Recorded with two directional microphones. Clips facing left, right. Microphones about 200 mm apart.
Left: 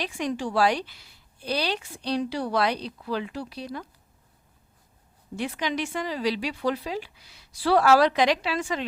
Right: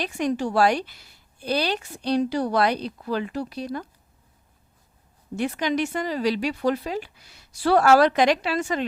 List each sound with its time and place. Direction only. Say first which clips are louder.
0.0 s a woman's voice: right 4 dB; 45° right (ahead or behind)
5.4 s a woman's voice: right 5 dB; 45° right (ahead or behind)